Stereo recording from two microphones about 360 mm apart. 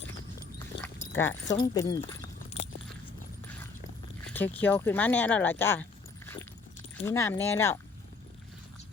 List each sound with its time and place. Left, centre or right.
0.8 s dog: centre
1.5 s speech: centre
4.3 s speech: centre
7.0 s speech: centre